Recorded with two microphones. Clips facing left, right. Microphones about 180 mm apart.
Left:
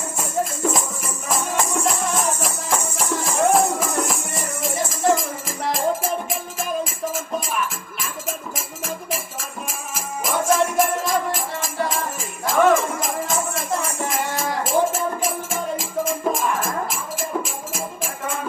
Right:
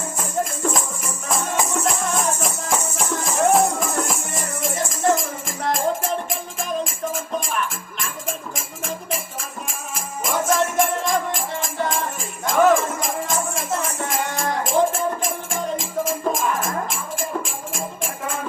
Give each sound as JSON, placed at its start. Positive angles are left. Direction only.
{"t": 0.2, "sound": "music", "side_deg": 10}
{"t": 1.8, "sound": "music", "side_deg": 0}